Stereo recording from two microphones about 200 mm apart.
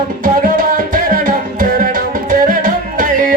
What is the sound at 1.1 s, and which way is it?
Music, 45° right (ahead or behind).